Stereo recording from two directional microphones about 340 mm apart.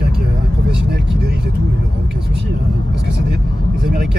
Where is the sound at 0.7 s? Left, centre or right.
Right.